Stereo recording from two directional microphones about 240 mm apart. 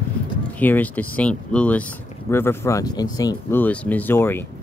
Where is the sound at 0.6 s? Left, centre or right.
Centre.